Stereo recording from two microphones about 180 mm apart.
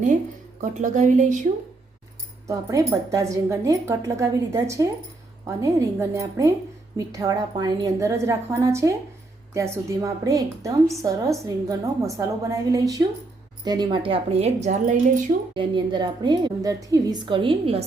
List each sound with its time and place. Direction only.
0.6 s a woman's voice: 45° right (ahead or behind)
2.5 s a woman's voice: 15° right (ahead or behind); by 15.2 s 40° right (ahead or behind)
15.5 s a woman's voice: 25° right (ahead or behind)